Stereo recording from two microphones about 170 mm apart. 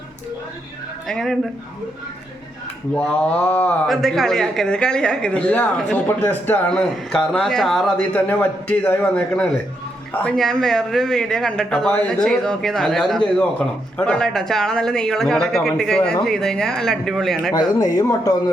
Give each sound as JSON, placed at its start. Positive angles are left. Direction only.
{"t": 1.0, "sound": "speech", "side_deg": 5}
{"t": 2.9, "sound": "speech", "side_deg": 5}
{"t": 17.5, "sound": "speech", "side_deg": 20}